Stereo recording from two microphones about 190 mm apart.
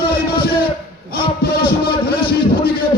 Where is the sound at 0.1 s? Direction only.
55° left (ahead or behind).